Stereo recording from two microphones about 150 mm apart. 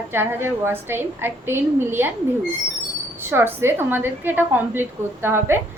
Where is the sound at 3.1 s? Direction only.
15° right (ahead or behind).